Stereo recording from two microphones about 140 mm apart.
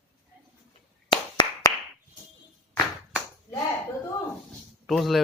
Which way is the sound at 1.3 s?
25° left (ahead or behind).